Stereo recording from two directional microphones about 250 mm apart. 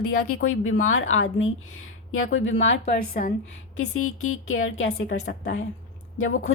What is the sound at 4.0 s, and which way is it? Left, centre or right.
Speech, left.